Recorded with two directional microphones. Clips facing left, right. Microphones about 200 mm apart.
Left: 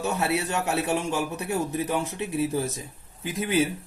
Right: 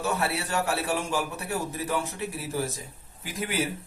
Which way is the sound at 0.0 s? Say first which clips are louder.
Left 3 dB; 20° left (ahead or behind).